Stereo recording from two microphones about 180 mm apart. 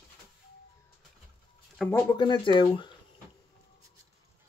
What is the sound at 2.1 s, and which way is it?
Speech, 25° left (ahead or behind).